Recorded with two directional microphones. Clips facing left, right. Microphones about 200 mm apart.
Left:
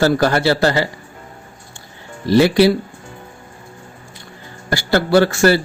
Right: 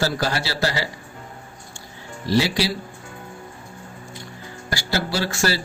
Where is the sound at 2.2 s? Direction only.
55° left (ahead or behind).